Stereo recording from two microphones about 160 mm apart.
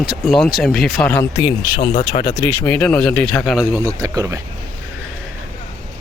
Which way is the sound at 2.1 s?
35° left (ahead or behind).